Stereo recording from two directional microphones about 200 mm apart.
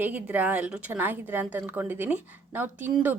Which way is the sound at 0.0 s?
10° right (ahead or behind).